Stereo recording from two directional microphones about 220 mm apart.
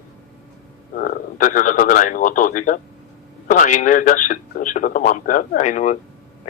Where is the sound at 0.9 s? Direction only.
40° left (ahead or behind).